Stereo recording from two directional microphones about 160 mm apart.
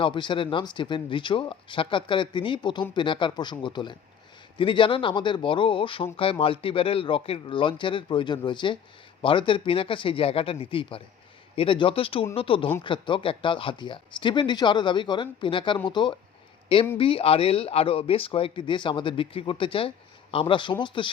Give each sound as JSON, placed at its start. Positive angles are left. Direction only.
{"t": 0.0, "sound": "speech", "side_deg": 30}